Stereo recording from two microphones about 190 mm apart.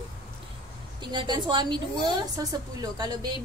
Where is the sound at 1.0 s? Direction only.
25° right (ahead or behind).